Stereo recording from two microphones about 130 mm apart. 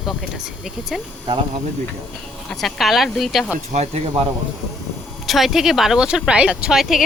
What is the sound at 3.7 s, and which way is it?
Speech, 60° right (ahead or behind).